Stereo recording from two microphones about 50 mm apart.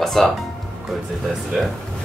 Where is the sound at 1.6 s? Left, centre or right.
Centre.